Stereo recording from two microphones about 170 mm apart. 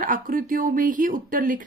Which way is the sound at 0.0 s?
55° right (ahead or behind).